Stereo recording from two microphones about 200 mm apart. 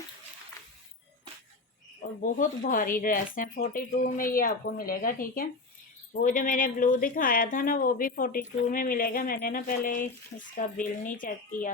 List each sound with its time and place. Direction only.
2.2 s speech: 40° left (ahead or behind)